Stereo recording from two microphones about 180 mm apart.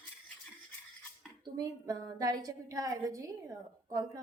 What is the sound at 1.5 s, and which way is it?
A woman's voice, 20° right (ahead or behind).